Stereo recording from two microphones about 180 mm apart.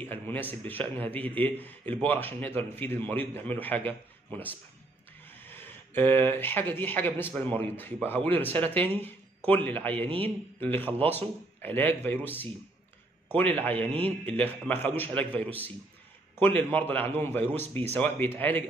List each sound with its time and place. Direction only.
0.0 s a man's voice: 10° left (ahead or behind)